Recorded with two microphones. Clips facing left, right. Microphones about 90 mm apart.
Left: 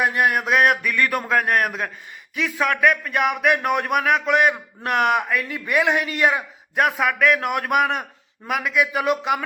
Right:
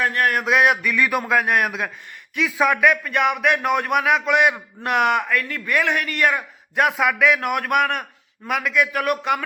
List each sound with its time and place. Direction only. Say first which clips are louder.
0.0 s mantra: left 1 dB; 15° left (ahead or behind)
0.3 s a man's voice: even; centre (ahead or behind); by 6.1 s 15° left (ahead or behind)
6.1 s mantra: right 1 dB; 10° left (ahead or behind)
6.7 s a man's voice: right 1 dB; centre (ahead or behind)